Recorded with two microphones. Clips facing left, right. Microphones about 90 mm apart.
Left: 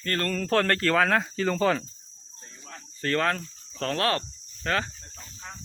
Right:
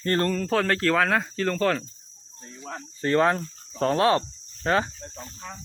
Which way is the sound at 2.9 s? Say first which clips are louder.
Right 5 dB; 20° right (ahead or behind).